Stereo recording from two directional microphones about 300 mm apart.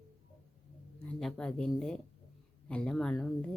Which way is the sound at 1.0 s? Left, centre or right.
Centre.